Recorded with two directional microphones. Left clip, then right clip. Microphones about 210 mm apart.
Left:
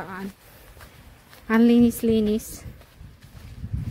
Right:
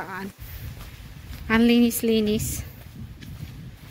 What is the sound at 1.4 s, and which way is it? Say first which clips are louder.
Speech: left 1 dB; 15° left (ahead or behind).